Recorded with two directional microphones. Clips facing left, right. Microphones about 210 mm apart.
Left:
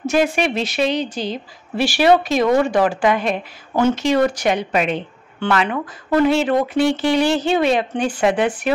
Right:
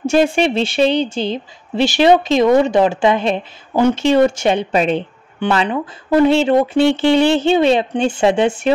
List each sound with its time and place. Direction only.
0.0 s a woman's voice: 30° right (ahead or behind)